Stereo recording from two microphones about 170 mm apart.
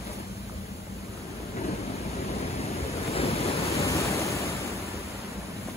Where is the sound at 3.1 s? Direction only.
35° left (ahead or behind).